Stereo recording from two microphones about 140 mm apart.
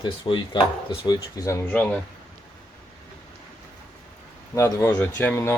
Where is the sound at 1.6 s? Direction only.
10° left (ahead or behind).